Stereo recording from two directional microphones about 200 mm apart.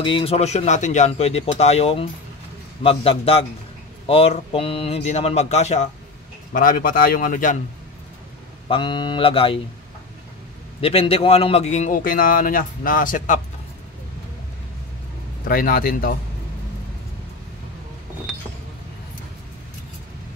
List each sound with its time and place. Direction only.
0.0 s a man's voice: 25° left (ahead or behind); by 7.5 s 40° left (ahead or behind)
8.6 s speech: 25° left (ahead or behind)
10.8 s a man's voice: 30° left (ahead or behind)
15.4 s speech: 45° left (ahead or behind)